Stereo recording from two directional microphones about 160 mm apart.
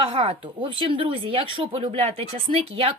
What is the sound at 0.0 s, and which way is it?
Speech, 35° right (ahead or behind).